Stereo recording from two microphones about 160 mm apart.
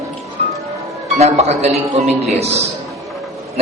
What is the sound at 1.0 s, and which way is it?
A man's voice, 45° right (ahead or behind).